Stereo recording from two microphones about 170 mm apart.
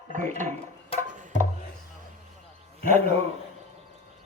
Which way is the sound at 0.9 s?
35° left (ahead or behind).